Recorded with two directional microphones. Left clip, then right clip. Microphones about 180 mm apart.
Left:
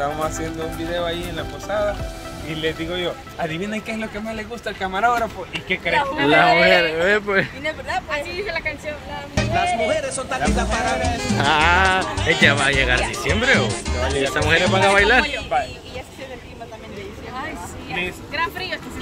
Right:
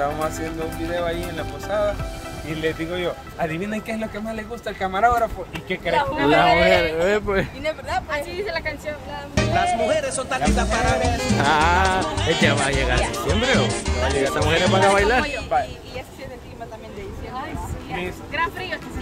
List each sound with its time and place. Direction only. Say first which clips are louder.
0.9 s speech: even; 35° right (ahead or behind)
2.6 s speech: left 1 dB; 30° right (ahead or behind); by 5.2 s 15° right (ahead or behind)
5.9 s speech: left 1 dB; 5° left (ahead or behind)
6.4 s speech: left 2 dB; 5° right (ahead or behind)
7.6 s speech: even; 10° left (ahead or behind)
18.3 s speech: right 1 dB; centre (ahead or behind)